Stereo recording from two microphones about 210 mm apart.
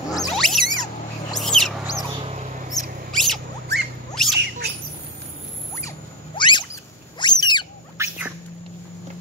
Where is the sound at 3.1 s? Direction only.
Centre (ahead or behind).